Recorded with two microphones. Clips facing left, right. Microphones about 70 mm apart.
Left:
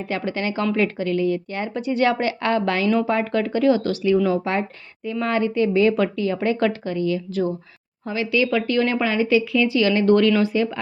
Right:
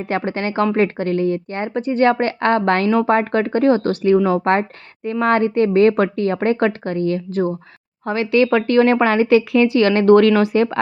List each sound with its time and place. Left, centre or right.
0.1 s speech: right